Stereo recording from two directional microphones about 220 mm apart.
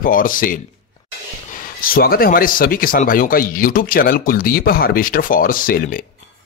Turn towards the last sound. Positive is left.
turn(degrees=40)  # may be behind; listen again after turning